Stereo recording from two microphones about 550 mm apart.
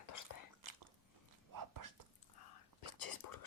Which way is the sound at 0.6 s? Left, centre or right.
Right.